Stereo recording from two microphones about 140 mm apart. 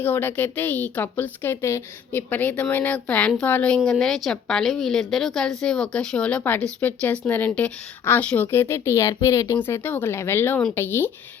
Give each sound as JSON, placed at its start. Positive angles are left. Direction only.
{"t": 0.0, "sound": "a woman's voice", "side_deg": 15}